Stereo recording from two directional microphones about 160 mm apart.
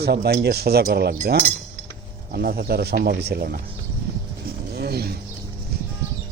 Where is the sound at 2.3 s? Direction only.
75° right (ahead or behind).